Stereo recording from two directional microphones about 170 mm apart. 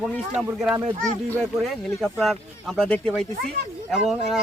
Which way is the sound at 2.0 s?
Centre (ahead or behind).